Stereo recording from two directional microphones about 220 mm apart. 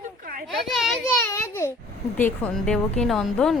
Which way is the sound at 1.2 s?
10° left (ahead or behind).